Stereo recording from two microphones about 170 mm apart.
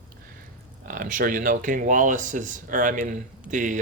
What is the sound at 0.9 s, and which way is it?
Speech, 50° right (ahead or behind).